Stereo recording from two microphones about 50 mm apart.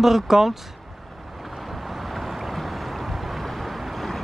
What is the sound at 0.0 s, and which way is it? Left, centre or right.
Speech, centre.